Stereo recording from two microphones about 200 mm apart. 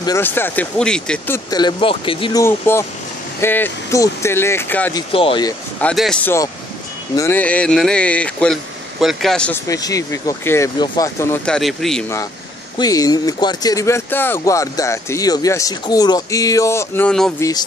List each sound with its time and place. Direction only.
0.0 s speech: 15° left (ahead or behind)
2.4 s speech: 10° left (ahead or behind)
5.1 s speech: 25° left (ahead or behind)
5.8 s speech: 5° left (ahead or behind)
9.7 s speech: 15° left (ahead or behind)
11.5 s speech: centre (ahead or behind)
12.7 s speech: 20° left (ahead or behind)
17.4 s speech: 20° left (ahead or behind)